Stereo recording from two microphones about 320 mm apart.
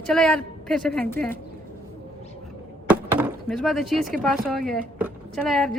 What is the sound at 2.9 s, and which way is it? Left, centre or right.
A man's voice, centre.